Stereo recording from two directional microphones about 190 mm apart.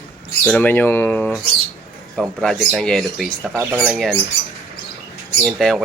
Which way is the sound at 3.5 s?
10° right (ahead or behind).